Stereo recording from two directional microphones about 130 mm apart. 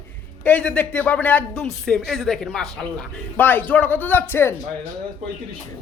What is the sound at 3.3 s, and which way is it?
A man's voice, 15° left (ahead or behind).